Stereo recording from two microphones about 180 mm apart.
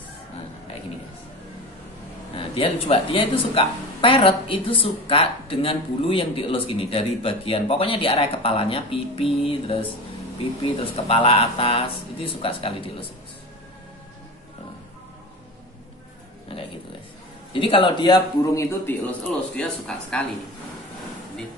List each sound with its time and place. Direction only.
2.3 s speech: 30° left (ahead or behind)
16.5 s a sound: 30° left (ahead or behind)
17.5 s a man's voice: 30° left (ahead or behind)
19.5 s speech: 5° left (ahead or behind)